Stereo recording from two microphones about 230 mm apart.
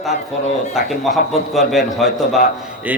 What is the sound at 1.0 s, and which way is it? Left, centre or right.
A man's voice, centre.